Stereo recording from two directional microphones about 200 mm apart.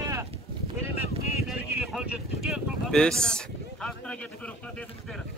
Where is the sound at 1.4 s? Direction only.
Centre (ahead or behind).